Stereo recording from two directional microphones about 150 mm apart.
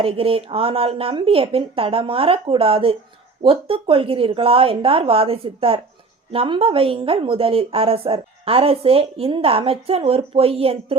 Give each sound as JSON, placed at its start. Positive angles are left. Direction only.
{"t": 0.0, "sound": "a woman's voice", "side_deg": -40}